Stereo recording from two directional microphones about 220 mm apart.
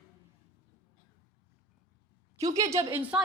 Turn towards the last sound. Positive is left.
turn(degrees=-10)  # may be behind; listen again after turning